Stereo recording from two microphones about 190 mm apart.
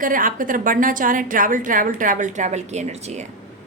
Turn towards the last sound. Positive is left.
turn(degrees=-35)  # may be behind; listen again after turning